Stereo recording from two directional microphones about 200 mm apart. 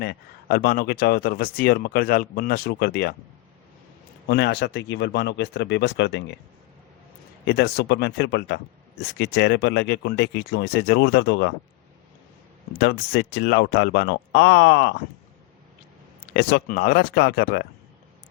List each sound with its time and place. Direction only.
0.0 s speech: 50° left (ahead or behind)
4.3 s speech: 55° left (ahead or behind)
7.4 s speech: 55° left (ahead or behind)
12.8 s speech: 55° left (ahead or behind)
16.3 s speech: 50° left (ahead or behind)